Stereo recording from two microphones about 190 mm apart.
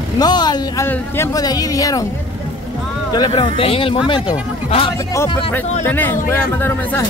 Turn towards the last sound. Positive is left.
turn(degrees=10)  # may be behind; listen again after turning